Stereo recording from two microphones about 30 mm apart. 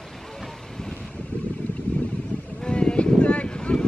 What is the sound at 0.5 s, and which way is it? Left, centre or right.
Vehicle, centre.